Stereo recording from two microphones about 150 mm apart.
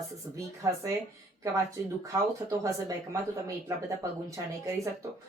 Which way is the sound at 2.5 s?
20° right (ahead or behind).